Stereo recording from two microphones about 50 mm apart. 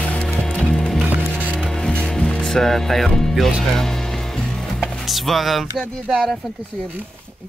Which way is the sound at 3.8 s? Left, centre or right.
Centre.